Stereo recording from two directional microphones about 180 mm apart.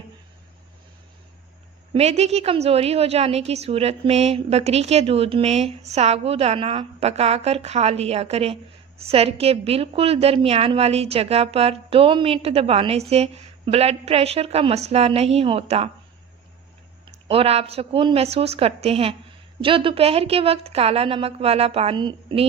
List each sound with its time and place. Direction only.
1.9 s a woman's voice: 35° right (ahead or behind)
17.2 s a woman's voice: 35° right (ahead or behind)